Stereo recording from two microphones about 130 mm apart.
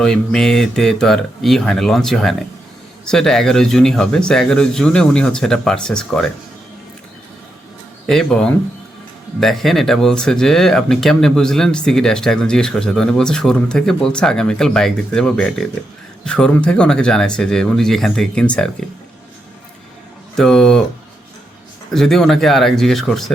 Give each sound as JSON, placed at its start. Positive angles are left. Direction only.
{"t": 0.0, "sound": "speech", "side_deg": 5}
{"t": 8.0, "sound": "speech", "side_deg": 5}
{"t": 20.3, "sound": "speech", "side_deg": 5}
{"t": 21.9, "sound": "speech", "side_deg": 5}